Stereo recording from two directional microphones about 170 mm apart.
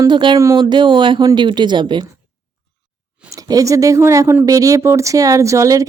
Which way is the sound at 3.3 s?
20° right (ahead or behind).